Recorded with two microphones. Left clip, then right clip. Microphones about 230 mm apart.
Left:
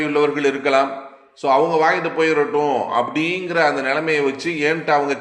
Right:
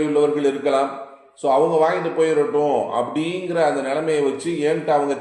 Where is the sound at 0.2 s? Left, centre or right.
Left.